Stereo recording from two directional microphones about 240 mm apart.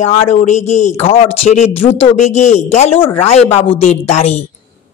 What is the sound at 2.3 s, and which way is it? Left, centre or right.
Speech, left.